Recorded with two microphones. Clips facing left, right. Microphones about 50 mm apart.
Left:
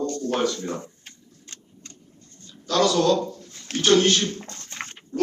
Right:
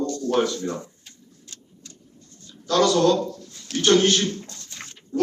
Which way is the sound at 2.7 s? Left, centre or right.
Centre.